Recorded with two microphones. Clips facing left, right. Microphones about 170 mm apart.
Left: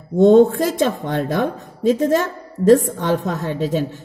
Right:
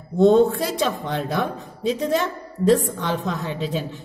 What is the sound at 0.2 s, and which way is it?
Speech, 50° left (ahead or behind).